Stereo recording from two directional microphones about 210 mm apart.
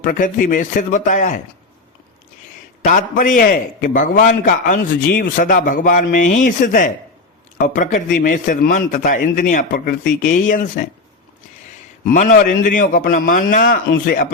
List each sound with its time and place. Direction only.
0.0 s a man's voice: 40° left (ahead or behind)
2.8 s a man's voice: 40° left (ahead or behind)
12.1 s a man's voice: 40° left (ahead or behind)